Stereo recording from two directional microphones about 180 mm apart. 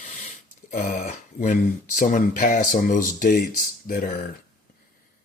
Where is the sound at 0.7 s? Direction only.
45° left (ahead or behind).